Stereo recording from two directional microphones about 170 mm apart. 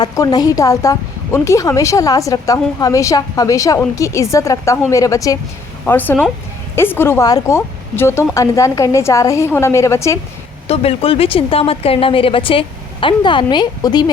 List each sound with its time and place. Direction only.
0.0 s a woman's voice: 25° left (ahead or behind)
10.7 s speech: 35° left (ahead or behind)